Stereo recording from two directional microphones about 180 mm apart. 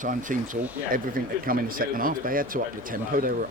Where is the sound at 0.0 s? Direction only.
45° right (ahead or behind).